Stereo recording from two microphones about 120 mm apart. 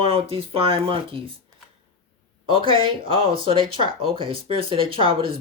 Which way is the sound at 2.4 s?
45° right (ahead or behind).